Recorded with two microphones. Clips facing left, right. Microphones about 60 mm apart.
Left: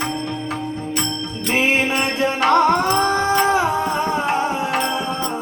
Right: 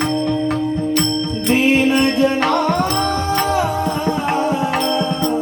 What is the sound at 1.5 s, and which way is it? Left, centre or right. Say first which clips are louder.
Music: right 4 dB; left.